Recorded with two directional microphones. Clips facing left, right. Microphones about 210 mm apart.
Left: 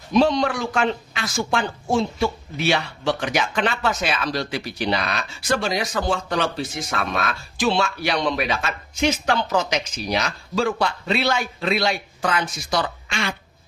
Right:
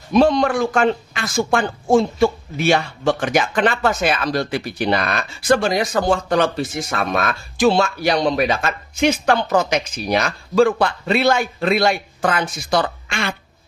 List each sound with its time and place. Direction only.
0.1 s speech: 55° right (ahead or behind)